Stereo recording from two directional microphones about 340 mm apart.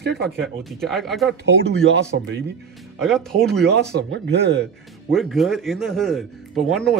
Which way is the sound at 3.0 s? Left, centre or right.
Centre.